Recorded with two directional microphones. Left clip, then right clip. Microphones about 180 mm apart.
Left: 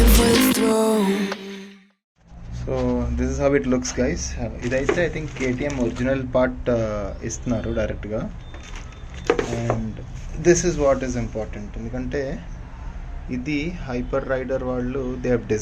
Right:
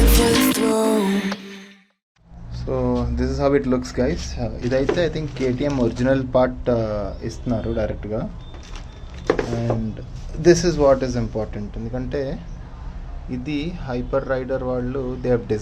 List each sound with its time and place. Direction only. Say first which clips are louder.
0.2 s music: right 1 dB; 20° left (ahead or behind)
0.7 s a sound: even; centre (ahead or behind)
2.6 s speech: right 1 dB; 5° right (ahead or behind)
4.4 s speech: right 2 dB; 20° right (ahead or behind)
6.3 s speech: left 1 dB; 10° right (ahead or behind)
10.4 s speech: right 3 dB; 20° right (ahead or behind)
12.0 s speech: even; 5° right (ahead or behind)